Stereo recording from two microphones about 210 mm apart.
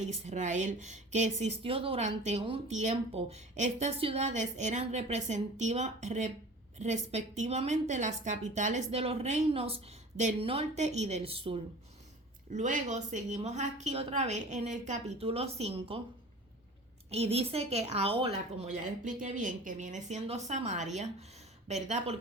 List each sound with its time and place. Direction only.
0.0 s a woman's voice: 35° right (ahead or behind)
17.1 s a woman's voice: 30° right (ahead or behind)